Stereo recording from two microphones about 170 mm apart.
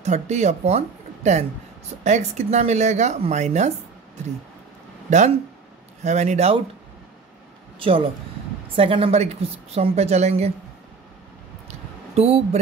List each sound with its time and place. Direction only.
0.0 s a woman's voice: 40° right (ahead or behind)
5.1 s a woman's voice: 40° right (ahead or behind)
8.7 s a woman's voice: 30° right (ahead or behind)
12.2 s a woman's voice: 35° right (ahead or behind)